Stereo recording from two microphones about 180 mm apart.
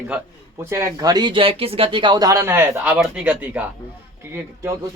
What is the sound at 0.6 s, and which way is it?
Speech, 15° right (ahead or behind).